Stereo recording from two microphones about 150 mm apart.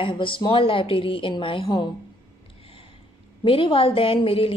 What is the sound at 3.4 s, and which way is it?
A woman's voice, 35° left (ahead or behind).